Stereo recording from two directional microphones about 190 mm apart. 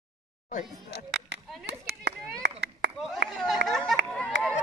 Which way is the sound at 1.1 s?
60° right (ahead or behind).